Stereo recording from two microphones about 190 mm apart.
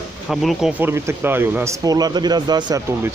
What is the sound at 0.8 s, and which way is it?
Speech, 15° right (ahead or behind).